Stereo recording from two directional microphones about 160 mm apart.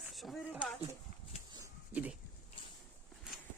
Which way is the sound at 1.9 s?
10° right (ahead or behind).